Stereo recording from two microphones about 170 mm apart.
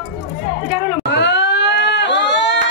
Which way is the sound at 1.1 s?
90° left.